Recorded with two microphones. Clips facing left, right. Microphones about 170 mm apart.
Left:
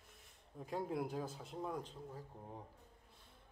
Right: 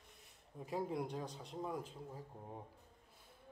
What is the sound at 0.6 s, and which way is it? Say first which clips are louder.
Speech: even; centre (ahead or behind).